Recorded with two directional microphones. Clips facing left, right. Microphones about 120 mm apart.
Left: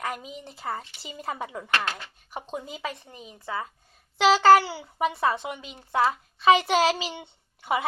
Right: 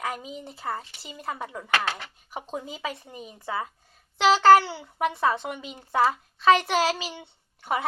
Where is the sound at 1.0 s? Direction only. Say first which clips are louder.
Left 1 dB; 20° left (ahead or behind).